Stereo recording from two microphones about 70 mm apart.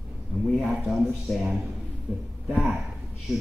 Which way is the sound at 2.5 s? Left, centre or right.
Centre.